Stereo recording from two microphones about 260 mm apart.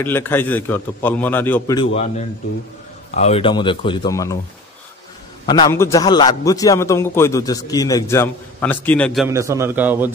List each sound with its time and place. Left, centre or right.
0.0 s a man's voice: centre
3.2 s speech: left
5.5 s a man's voice: centre
9.3 s a man's voice: centre